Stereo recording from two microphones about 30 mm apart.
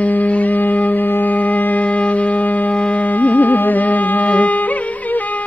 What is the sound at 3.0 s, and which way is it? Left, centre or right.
Music, left.